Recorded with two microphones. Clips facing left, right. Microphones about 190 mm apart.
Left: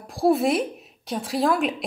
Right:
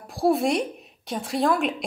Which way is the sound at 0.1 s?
Centre (ahead or behind).